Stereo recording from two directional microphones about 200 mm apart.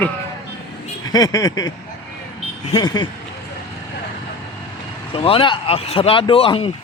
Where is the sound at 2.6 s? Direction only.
25° left (ahead or behind).